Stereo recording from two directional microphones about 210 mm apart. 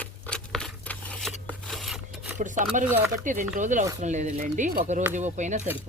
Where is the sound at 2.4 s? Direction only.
35° right (ahead or behind).